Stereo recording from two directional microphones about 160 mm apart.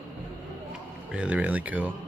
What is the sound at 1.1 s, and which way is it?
Speech, 5° right (ahead or behind).